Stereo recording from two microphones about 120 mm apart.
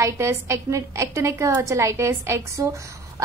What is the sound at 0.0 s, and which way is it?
A woman's voice, 25° right (ahead or behind).